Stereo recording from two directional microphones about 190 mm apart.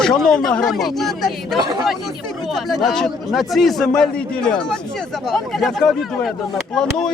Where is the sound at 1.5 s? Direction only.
20° right (ahead or behind).